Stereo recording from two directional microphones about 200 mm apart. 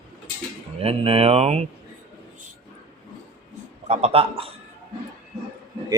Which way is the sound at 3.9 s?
30° right (ahead or behind).